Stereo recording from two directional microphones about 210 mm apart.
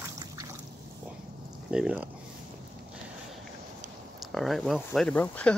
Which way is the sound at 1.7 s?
5° right (ahead or behind).